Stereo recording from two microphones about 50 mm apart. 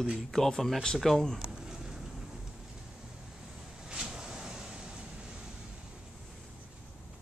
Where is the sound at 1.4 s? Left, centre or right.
Centre.